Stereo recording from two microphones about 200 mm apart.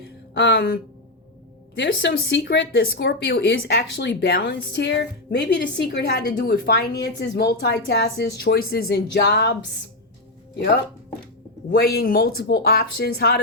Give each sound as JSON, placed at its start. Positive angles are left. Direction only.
{"t": 0.3, "sound": "speech", "side_deg": 65}
{"t": 11.9, "sound": "a woman's voice", "side_deg": 50}